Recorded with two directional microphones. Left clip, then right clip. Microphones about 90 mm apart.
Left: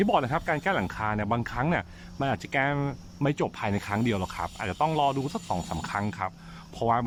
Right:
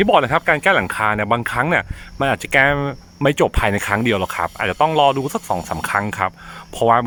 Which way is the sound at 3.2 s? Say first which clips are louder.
Right 12 dB; 50° right (ahead or behind).